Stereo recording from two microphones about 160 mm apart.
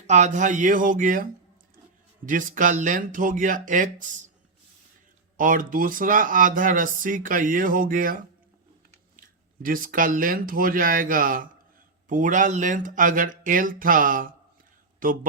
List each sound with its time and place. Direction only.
0.1 s speech: 50° right (ahead or behind)
5.4 s speech: 60° right (ahead or behind)
9.2 s speech: 60° right (ahead or behind)
14.9 s a sound: 60° right (ahead or behind)